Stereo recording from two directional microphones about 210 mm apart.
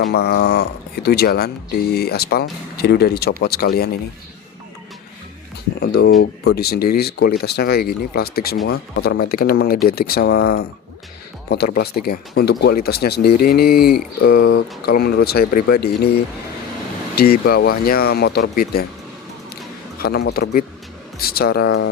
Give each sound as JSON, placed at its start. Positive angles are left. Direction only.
{"t": 0.1, "sound": "speech", "side_deg": 50}
{"t": 5.8, "sound": "speech", "side_deg": 50}
{"t": 20.0, "sound": "speech", "side_deg": 50}